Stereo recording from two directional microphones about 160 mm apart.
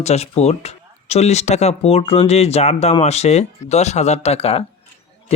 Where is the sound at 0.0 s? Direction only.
45° left (ahead or behind).